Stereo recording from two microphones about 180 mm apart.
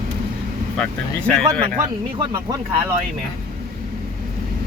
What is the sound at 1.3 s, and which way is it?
Speech, 5° left (ahead or behind).